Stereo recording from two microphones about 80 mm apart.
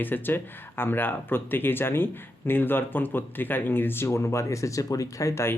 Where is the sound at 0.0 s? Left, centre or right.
Left.